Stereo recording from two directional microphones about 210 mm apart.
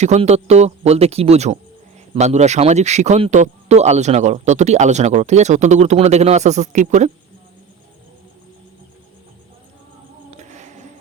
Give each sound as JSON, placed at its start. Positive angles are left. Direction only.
{"t": 0.0, "sound": "speech", "side_deg": -30}
{"t": 10.3, "sound": "music", "side_deg": -35}